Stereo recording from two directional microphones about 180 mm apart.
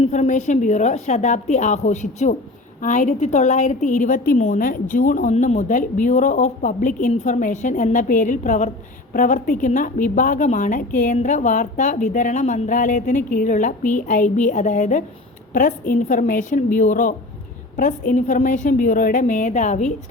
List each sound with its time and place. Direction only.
0.0 s a woman's voice: 40° left (ahead or behind)